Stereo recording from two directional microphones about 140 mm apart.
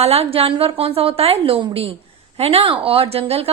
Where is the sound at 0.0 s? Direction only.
45° right (ahead or behind).